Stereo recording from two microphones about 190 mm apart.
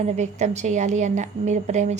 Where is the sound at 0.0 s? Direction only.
35° right (ahead or behind).